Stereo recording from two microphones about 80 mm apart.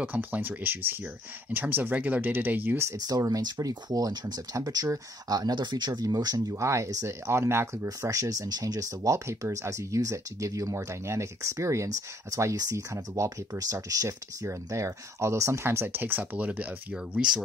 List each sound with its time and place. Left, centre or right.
0.0 s speech: right
3.1 s speech: right
4.6 s speech: right
5.4 s speech: right
6.5 s speech: right
14.0 s speech: right; by 17.4 s centre